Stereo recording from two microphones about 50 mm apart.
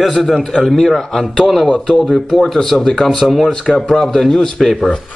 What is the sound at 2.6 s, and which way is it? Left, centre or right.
Speech, centre.